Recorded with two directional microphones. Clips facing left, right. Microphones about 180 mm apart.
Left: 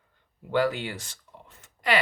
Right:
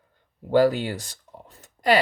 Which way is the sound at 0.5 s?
35° right (ahead or behind).